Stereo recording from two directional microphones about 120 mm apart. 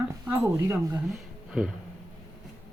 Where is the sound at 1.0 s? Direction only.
Centre (ahead or behind).